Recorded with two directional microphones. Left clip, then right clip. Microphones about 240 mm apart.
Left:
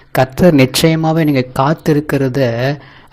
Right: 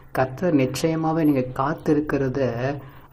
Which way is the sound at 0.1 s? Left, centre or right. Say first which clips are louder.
Left 10 dB; left.